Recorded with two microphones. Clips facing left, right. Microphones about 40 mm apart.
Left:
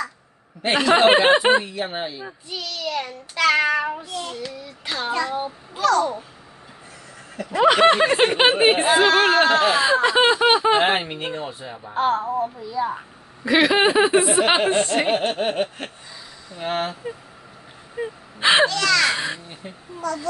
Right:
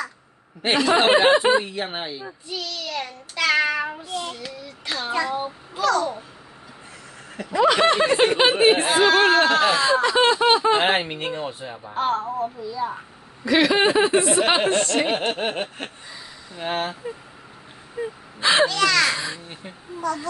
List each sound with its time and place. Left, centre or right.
0.7 s speech: left
1.6 s speech: right
2.5 s child singing: centre
7.5 s speech: left
8.8 s speech: centre
9.8 s speech: centre
10.9 s a sound: centre
11.8 s speech: centre; by 15.1 s left
15.1 s a sound: centre
16.7 s speech: centre
18.0 s speech: left
18.7 s a sound: centre
19.1 s speech: left
20.0 s a sound: centre